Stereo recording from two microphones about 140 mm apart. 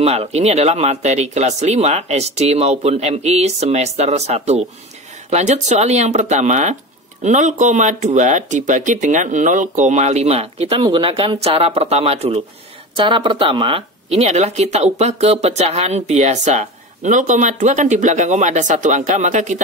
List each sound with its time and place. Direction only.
0.0 s speech: 50° right (ahead or behind)